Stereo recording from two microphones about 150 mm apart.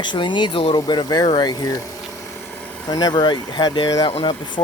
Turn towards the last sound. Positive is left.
turn(degrees=35)  # may be behind; listen again after turning